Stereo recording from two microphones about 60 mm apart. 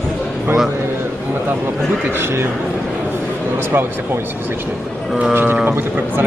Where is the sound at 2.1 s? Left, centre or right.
Right.